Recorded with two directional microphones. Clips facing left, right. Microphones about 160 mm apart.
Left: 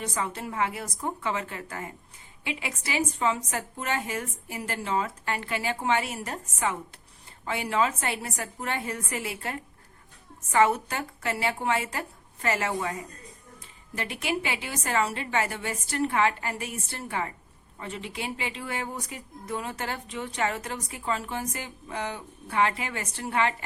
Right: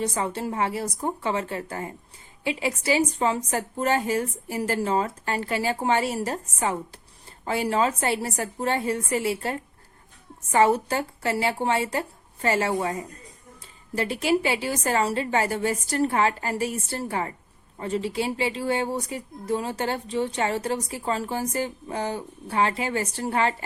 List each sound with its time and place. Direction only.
0.0 s a woman's voice: 30° right (ahead or behind)